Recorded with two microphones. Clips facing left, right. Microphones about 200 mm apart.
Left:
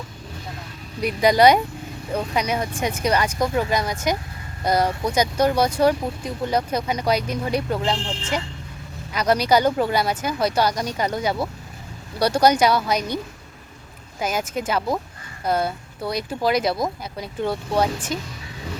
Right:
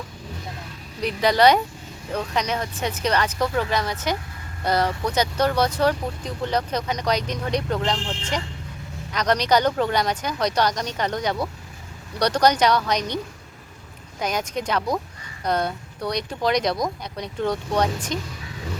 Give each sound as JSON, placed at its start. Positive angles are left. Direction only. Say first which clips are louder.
{"t": 1.0, "sound": "speech", "louder": "left 2 dB", "side_deg": 10}
{"t": 14.2, "sound": "speech", "louder": "left 1 dB", "side_deg": 5}